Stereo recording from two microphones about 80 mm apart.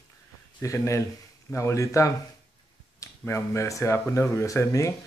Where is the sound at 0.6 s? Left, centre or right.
Left.